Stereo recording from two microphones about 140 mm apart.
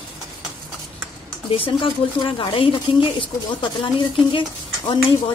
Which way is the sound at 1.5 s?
40° left (ahead or behind).